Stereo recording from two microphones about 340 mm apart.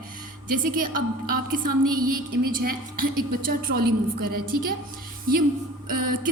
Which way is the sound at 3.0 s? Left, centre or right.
Right.